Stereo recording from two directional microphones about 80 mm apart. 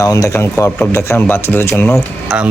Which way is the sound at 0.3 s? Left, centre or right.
Left.